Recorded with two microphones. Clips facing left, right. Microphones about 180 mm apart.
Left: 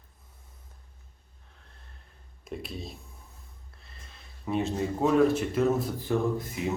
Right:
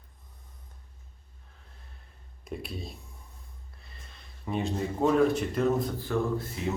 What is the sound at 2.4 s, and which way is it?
Speech, centre (ahead or behind).